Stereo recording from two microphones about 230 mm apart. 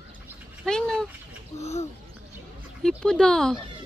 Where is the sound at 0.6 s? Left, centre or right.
Centre.